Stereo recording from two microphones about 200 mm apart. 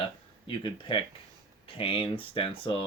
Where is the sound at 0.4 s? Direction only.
25° left (ahead or behind).